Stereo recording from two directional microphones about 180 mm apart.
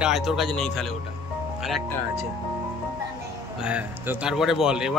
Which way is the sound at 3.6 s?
5° right (ahead or behind).